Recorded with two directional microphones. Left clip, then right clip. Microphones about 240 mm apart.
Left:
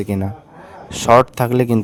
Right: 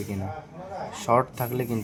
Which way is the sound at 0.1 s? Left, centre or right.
Left.